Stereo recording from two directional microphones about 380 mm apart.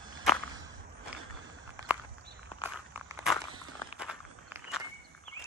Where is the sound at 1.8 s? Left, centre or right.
Centre.